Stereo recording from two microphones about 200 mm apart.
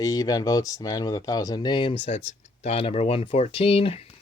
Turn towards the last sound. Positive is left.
turn(degrees=30)  # may be behind; listen again after turning